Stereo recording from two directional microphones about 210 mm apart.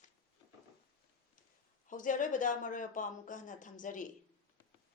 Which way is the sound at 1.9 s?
40° left (ahead or behind).